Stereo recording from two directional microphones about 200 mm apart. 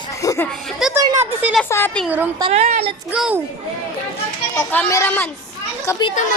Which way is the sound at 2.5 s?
35° right (ahead or behind).